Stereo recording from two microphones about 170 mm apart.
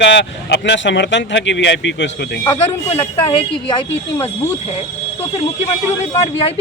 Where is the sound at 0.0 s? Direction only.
90° left.